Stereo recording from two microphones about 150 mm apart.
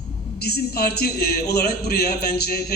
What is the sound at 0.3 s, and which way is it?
A man's voice, 90° left.